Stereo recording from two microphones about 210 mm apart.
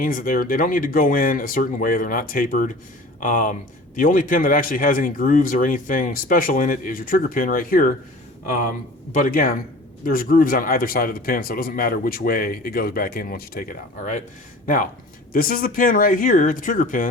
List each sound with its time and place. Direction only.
0.0 s speech: 40° left (ahead or behind)
9.1 s speech: 40° left (ahead or behind)
15.3 s speech: 45° left (ahead or behind)